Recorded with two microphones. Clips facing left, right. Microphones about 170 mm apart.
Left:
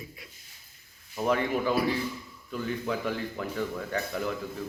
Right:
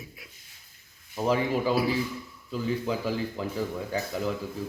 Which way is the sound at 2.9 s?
25° right (ahead or behind).